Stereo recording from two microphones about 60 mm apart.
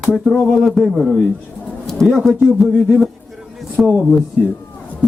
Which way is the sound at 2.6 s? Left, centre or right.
Centre.